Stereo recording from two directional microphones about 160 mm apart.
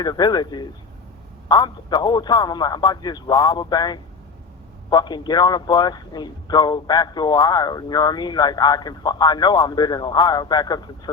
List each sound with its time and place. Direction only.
0.0 s a man's voice: 25° left (ahead or behind)